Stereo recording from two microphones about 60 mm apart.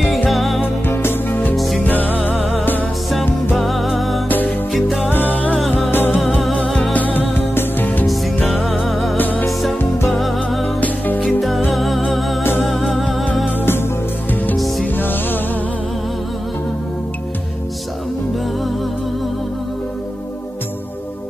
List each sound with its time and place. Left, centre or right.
0.3 s music: centre
0.8 s music: left
3.5 s music: centre
4.3 s music: left
4.7 s music: centre
5.0 s music: left
6.5 s music: left
8.8 s music: centre
9.1 s music: left
9.5 s music: centre
11.7 s music: centre
13.6 s music: left